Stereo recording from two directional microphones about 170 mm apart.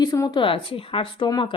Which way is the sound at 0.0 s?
20° left (ahead or behind).